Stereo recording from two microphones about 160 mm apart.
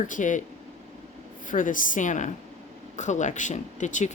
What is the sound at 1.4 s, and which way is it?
A woman's voice, 55° left (ahead or behind).